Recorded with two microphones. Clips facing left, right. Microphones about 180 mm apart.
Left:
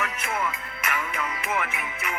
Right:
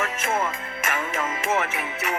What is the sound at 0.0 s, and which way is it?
Music, 45° right (ahead or behind).